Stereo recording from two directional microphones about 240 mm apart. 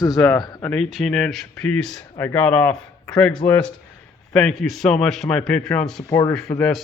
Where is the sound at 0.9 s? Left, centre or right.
Centre.